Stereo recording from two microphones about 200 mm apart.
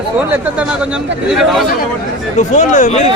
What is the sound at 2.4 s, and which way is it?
Speech, 40° left (ahead or behind).